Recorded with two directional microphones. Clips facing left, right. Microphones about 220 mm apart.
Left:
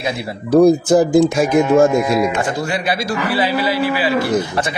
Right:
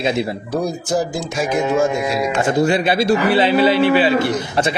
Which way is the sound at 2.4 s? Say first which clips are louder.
Right 5 dB; 25° right (ahead or behind).